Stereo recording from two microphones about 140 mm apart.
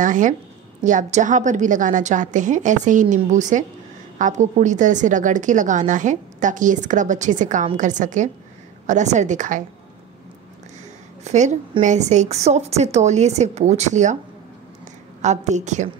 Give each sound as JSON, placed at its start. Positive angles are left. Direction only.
{"t": 0.0, "sound": "a woman's voice", "side_deg": -65}
{"t": 11.2, "sound": "a woman's voice", "side_deg": -60}
{"t": 15.2, "sound": "a woman's voice", "side_deg": -55}